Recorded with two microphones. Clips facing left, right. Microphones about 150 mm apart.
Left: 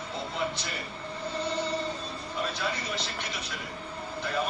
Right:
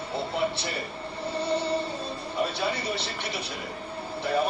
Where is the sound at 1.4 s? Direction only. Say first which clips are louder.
Right 4 dB; 30° right (ahead or behind).